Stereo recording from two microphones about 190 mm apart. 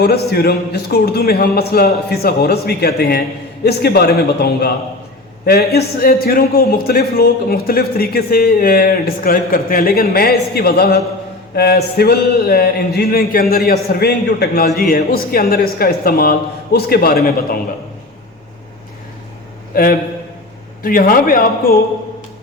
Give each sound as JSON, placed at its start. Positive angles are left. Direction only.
{"t": 0.3, "sound": "a man's voice", "side_deg": 55}
{"t": 19.7, "sound": "a man's voice", "side_deg": 50}